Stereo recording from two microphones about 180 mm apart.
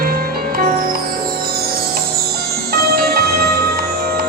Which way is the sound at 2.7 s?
60° right (ahead or behind).